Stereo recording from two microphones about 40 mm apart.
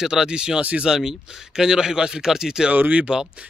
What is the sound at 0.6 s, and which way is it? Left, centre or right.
Speech, right.